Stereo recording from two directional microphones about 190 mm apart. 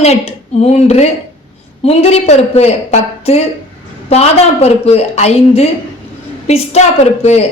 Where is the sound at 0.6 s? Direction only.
35° left (ahead or behind).